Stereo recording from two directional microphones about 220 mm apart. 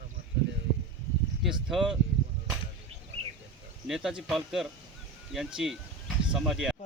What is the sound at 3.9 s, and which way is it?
A man's voice, 5° right (ahead or behind).